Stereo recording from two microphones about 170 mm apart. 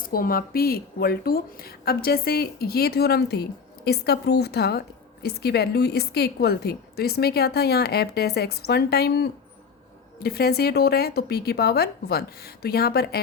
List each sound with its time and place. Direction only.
0.1 s a woman's voice: 60° left (ahead or behind)